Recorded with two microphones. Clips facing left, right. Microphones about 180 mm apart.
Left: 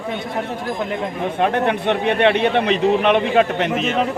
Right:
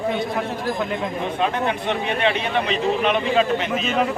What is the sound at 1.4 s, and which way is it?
A man's voice, 60° left (ahead or behind).